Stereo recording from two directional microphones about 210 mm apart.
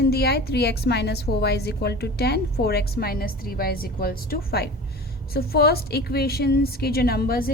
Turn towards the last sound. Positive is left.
turn(degrees=45)  # may be behind; listen again after turning